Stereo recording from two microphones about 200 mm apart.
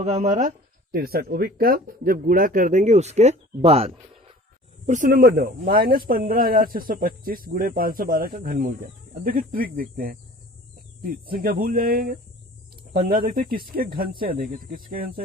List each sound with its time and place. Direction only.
0.0 s speech: 35° right (ahead or behind)
4.9 s speech: 40° right (ahead or behind)